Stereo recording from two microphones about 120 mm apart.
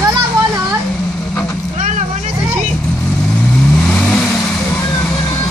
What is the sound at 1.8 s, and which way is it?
Vehicle, 90° right.